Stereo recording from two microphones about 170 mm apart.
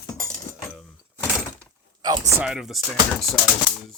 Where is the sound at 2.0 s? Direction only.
20° right (ahead or behind).